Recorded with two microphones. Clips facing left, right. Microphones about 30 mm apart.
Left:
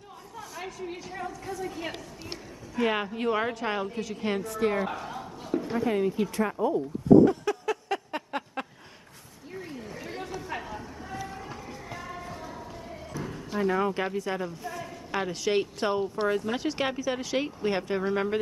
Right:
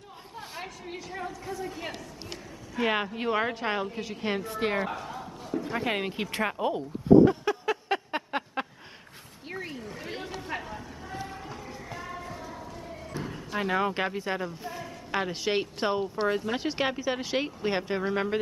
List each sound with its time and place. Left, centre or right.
0.8 s speech: centre
2.7 s a woman's voice: centre
4.5 s speech: right
4.8 s a sound: centre
5.9 s speech: right
6.3 s speech: right
7.2 s a sound: right
9.5 s a sound: right
9.8 s chatter: centre
10.5 s a sound: centre
13.2 s basketball bounce: centre
13.7 s a woman's voice: right
14.4 s a woman's voice: centre